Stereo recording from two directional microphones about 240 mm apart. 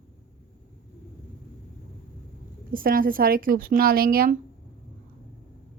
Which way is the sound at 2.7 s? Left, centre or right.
Right.